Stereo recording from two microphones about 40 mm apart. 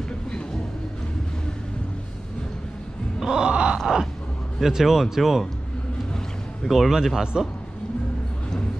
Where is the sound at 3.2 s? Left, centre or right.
Centre.